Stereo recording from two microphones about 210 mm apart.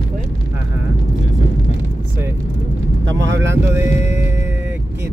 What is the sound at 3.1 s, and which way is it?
Speech, 60° right (ahead or behind).